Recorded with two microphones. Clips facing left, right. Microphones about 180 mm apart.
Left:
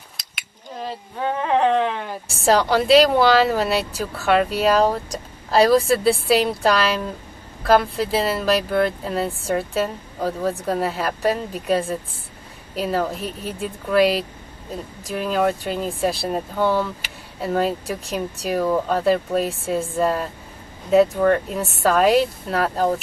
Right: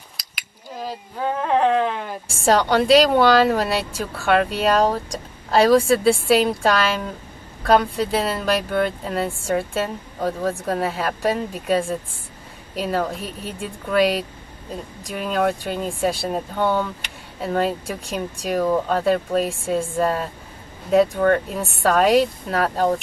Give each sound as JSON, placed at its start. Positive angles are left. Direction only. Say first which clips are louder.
{"t": 0.2, "sound": "speech", "louder": "right 1 dB", "side_deg": -5}